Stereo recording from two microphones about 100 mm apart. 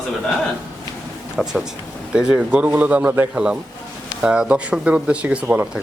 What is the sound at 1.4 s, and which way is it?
Speech, 10° right (ahead or behind).